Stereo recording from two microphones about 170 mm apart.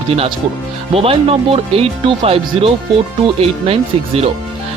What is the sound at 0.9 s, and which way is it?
Speech, 35° right (ahead or behind).